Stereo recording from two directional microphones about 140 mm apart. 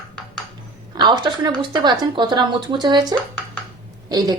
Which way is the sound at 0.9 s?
35° right (ahead or behind).